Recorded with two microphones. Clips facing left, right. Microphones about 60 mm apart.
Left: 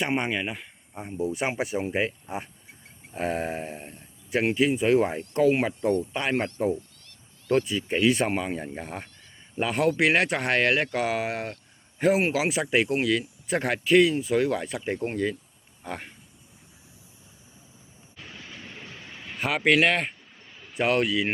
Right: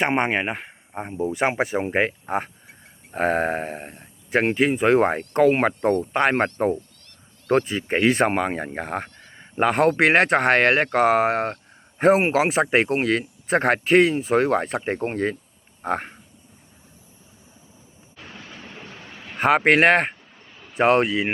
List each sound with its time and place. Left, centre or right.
0.2 s speech: right
18.3 s a sound: right
18.9 s vehicle: right
19.4 s speech: right
20.7 s speech: right